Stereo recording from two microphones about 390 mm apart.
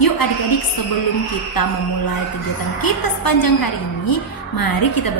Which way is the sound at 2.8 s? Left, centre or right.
Left.